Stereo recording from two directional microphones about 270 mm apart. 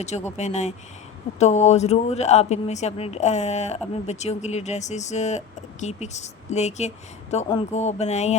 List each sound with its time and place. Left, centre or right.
0.3 s speech: left